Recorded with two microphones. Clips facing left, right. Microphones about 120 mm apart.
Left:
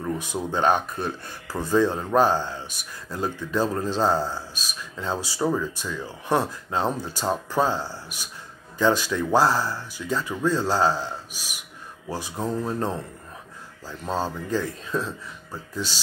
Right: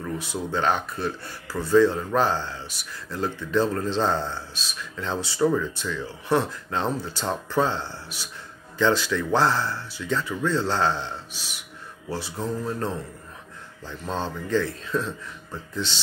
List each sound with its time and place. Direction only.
0.0 s speech: 15° left (ahead or behind)
13.8 s speech: 10° left (ahead or behind)